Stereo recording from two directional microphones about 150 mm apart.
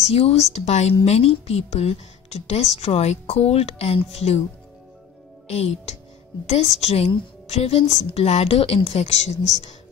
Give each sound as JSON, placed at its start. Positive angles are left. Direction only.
{"t": 0.1, "sound": "a woman's voice", "side_deg": 45}
{"t": 5.5, "sound": "a woman's voice", "side_deg": 45}